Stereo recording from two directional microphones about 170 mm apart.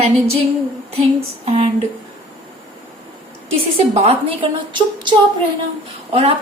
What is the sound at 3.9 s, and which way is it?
A woman's voice, 40° right (ahead or behind).